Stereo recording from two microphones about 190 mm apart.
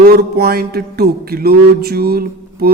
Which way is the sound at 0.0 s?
55° right (ahead or behind).